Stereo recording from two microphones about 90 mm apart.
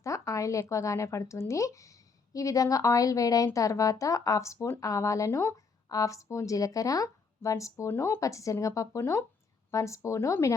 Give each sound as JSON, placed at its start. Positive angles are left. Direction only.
{"t": 0.0, "sound": "speech", "side_deg": 35}